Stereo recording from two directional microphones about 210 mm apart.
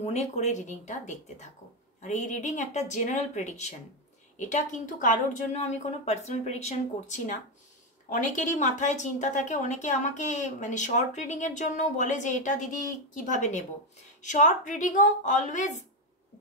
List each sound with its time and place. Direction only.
0.0 s a woman's voice: 30° left (ahead or behind)